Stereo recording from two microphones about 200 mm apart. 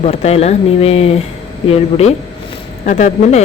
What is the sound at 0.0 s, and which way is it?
A woman's voice, 30° left (ahead or behind).